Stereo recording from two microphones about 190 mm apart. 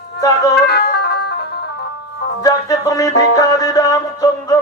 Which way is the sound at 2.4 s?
20° left (ahead or behind).